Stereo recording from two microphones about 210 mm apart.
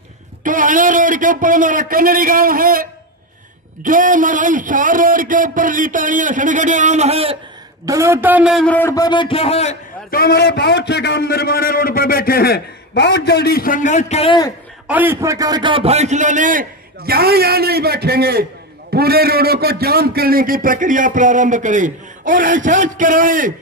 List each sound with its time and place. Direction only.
0.4 s a man's voice: 40° right (ahead or behind)
7.8 s a man's voice: 15° right (ahead or behind); by 9.8 s 30° left (ahead or behind)
10.1 s a man's voice: 50° left (ahead or behind); by 14.5 s 25° left (ahead or behind)
14.9 s a man's voice: 10° right (ahead or behind); by 23.5 s 40° right (ahead or behind)